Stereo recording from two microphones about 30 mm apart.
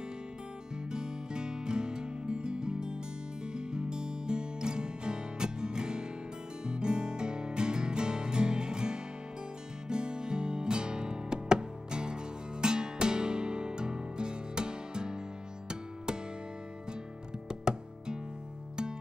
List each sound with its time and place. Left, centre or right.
0.8 s music: right
17.5 s music: right